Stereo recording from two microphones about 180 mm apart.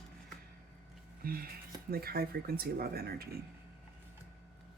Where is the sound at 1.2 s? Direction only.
55° right (ahead or behind).